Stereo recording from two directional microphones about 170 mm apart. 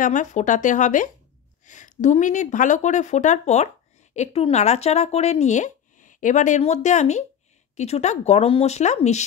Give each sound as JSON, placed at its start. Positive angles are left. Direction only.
{"t": 0.0, "sound": "speech", "side_deg": 45}